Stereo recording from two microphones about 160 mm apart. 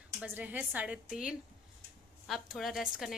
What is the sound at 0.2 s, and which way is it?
A woman's voice, 10° right (ahead or behind).